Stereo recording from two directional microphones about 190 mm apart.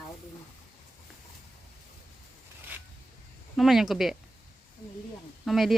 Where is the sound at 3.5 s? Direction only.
Centre (ahead or behind).